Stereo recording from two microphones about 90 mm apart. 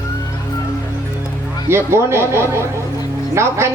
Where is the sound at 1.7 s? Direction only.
30° right (ahead or behind).